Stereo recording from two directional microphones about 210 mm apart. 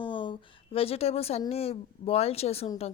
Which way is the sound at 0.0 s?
25° left (ahead or behind).